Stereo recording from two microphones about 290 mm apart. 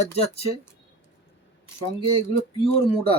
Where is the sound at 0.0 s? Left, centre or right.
Left.